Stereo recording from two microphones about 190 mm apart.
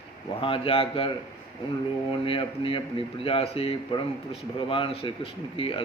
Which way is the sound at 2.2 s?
30° left (ahead or behind).